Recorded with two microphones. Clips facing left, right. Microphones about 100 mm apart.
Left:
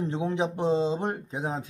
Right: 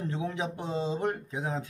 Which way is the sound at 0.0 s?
25° left (ahead or behind).